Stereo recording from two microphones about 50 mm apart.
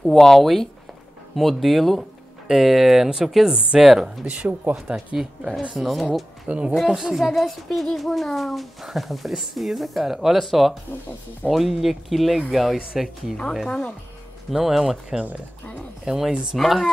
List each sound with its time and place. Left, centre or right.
0.0 s a child's voice: centre
4.3 s speech: right
4.7 s speech: centre
5.4 s speech: right
5.8 s a child's voice: centre
6.4 s speech: right
6.9 s a child's voice: centre
13.7 s speech: centre
14.5 s speech: centre
15.6 s speech: left
16.1 s a child's voice: centre